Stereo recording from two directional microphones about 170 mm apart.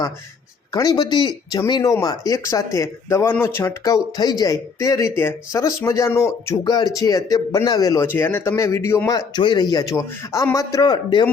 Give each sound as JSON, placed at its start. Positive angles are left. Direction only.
{"t": 0.7, "sound": "speech", "side_deg": 20}